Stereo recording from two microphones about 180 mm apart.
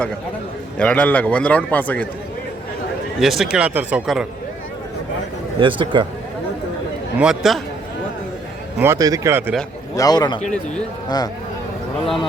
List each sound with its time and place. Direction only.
0.8 s a man's voice: 10° left (ahead or behind)
3.2 s speech: centre (ahead or behind)
5.5 s speech: 25° right (ahead or behind)
7.2 s speech: 5° right (ahead or behind)
8.8 s speech: 15° right (ahead or behind)
9.9 s a man's voice: 20° left (ahead or behind)
12.0 s speech: centre (ahead or behind)